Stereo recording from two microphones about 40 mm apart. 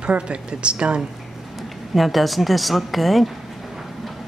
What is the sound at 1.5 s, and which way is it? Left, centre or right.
Speech, centre.